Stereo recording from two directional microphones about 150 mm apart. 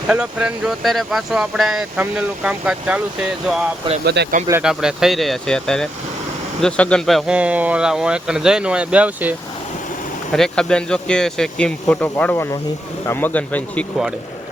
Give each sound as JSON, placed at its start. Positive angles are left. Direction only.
{"t": 0.1, "sound": "speech", "side_deg": -10}
{"t": 4.0, "sound": "speech", "side_deg": -90}
{"t": 4.6, "sound": "speech", "side_deg": -5}
{"t": 10.3, "sound": "speech", "side_deg": 5}